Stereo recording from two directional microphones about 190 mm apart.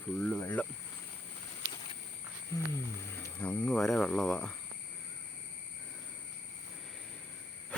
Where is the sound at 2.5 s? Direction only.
15° left (ahead or behind).